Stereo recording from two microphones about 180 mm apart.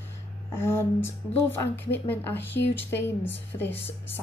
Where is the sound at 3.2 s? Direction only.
85° left.